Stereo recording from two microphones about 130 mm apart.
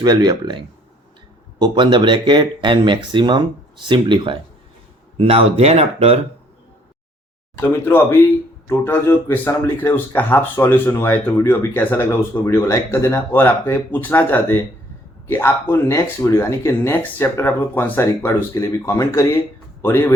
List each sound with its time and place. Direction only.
0.0 s speech: 35° right (ahead or behind); by 6.1 s 55° right (ahead or behind)
7.5 s speech: 15° left (ahead or behind)